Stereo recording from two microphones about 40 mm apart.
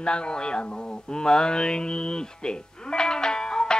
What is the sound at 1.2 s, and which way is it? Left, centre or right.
Speech, left.